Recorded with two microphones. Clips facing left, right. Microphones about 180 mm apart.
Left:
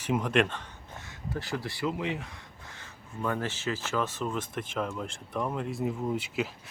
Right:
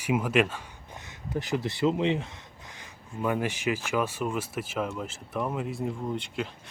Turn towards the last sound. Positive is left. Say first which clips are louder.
# left 1 dB
turn(degrees=5)  # may be behind; listen again after turning